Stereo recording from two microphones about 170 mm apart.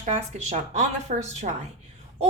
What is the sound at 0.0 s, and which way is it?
A woman's voice, 40° right (ahead or behind).